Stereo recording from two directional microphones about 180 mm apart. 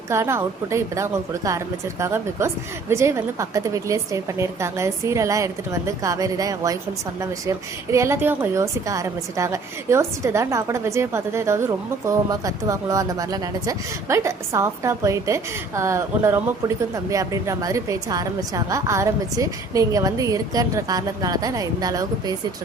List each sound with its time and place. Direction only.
0.1 s a woman's voice: 15° right (ahead or behind)